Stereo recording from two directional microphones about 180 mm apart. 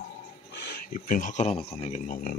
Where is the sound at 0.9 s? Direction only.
50° left (ahead or behind).